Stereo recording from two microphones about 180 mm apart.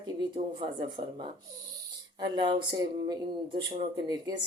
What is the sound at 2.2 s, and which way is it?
Speech, 25° right (ahead or behind).